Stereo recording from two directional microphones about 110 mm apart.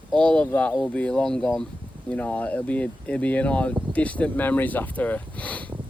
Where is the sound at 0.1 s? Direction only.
10° left (ahead or behind).